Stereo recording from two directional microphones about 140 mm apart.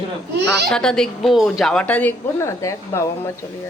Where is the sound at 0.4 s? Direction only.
5° left (ahead or behind); by 3.1 s 20° left (ahead or behind).